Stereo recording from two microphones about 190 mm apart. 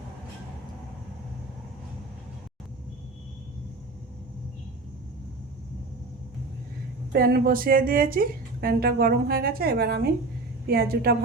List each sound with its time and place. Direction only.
7.1 s a woman's voice: 55° right (ahead or behind)